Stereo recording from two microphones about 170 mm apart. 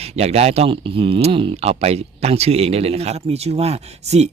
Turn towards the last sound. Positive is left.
turn(degrees=-40)  # may be behind; listen again after turning